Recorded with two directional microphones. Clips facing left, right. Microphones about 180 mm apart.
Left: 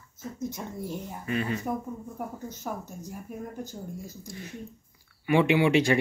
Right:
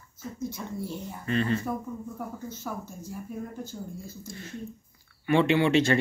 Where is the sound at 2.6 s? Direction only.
35° left (ahead or behind).